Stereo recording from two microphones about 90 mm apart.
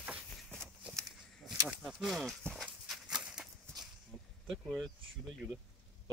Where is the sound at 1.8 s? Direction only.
Centre (ahead or behind).